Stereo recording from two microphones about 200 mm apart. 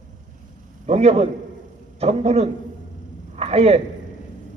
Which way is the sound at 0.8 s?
35° right (ahead or behind).